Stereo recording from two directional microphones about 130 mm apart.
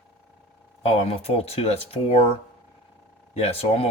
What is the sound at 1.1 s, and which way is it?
Speech, 50° left (ahead or behind).